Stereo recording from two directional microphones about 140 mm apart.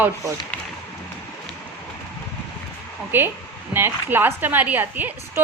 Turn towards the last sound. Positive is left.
turn(degrees=-15)  # may be behind; listen again after turning